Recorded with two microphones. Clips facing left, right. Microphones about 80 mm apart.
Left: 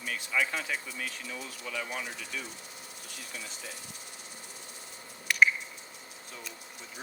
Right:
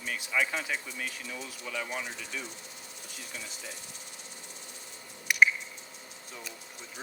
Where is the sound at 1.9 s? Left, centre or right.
Right.